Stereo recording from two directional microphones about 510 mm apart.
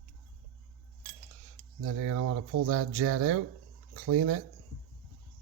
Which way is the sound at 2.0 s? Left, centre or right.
Right.